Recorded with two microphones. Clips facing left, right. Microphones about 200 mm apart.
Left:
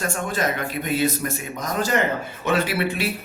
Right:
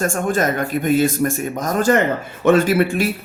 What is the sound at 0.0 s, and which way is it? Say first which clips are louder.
Speech: right 6 dB; 50° right (ahead or behind).